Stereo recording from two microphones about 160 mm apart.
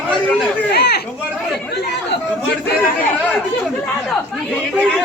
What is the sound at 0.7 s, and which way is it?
Speech, 90° left.